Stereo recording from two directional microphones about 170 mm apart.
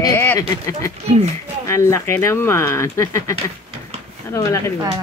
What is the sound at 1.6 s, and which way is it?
Speech, 15° left (ahead or behind).